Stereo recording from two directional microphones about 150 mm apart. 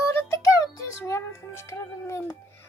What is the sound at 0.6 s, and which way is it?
Music, 20° left (ahead or behind).